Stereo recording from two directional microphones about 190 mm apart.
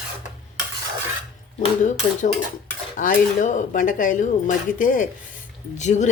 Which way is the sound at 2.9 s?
45° left (ahead or behind).